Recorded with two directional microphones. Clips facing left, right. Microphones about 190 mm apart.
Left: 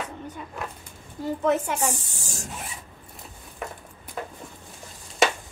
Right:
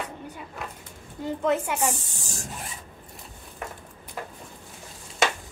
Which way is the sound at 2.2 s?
15° left (ahead or behind).